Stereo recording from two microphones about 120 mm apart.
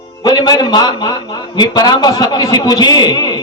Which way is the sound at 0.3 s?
35° left (ahead or behind).